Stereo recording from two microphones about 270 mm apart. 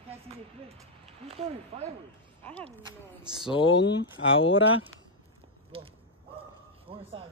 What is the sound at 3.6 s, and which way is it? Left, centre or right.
Speech, left.